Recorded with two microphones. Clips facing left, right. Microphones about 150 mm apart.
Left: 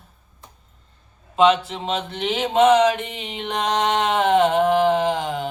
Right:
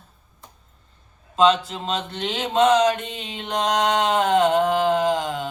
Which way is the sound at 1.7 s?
20° left (ahead or behind).